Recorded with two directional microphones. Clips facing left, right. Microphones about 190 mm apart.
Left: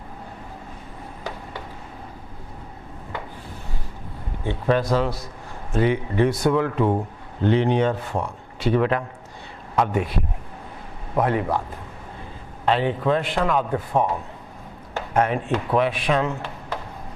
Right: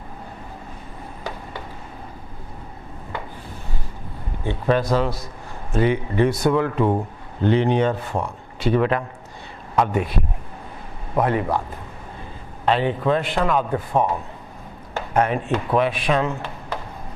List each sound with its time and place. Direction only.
4.4 s a man's voice: 15° right (ahead or behind)
12.6 s speech: 15° right (ahead or behind)